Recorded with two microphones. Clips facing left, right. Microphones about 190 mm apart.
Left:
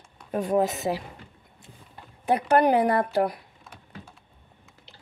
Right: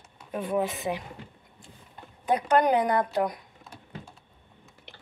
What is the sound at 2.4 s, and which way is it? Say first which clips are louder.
Speech: left 2 dB; 30° left (ahead or behind).